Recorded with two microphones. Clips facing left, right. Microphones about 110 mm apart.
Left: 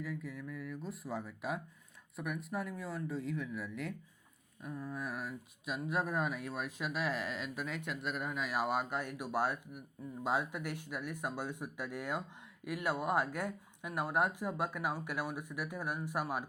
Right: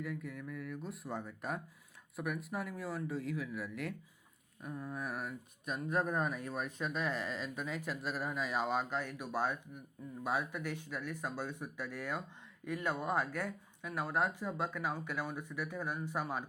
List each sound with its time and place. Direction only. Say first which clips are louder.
0.0 s speech: even; centre (ahead or behind)